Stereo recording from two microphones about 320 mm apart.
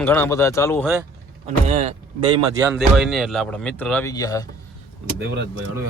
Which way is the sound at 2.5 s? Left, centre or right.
Centre.